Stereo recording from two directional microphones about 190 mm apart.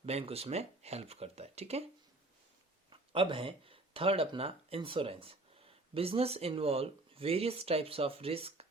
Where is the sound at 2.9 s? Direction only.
25° right (ahead or behind).